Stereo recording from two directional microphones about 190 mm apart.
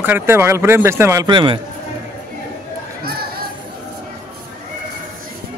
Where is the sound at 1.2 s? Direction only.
25° right (ahead or behind).